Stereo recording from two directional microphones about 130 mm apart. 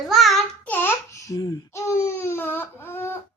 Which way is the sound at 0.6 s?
15° left (ahead or behind).